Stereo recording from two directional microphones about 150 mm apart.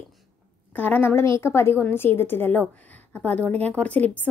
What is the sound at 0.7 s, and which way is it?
A woman's voice, 10° left (ahead or behind).